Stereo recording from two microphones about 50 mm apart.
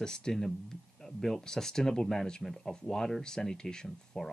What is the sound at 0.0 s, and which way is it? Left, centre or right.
Speech, centre.